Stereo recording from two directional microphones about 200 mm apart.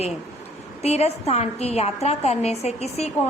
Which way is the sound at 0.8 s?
30° left (ahead or behind).